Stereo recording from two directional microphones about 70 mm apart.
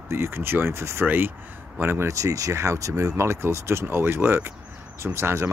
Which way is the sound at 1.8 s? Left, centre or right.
Right.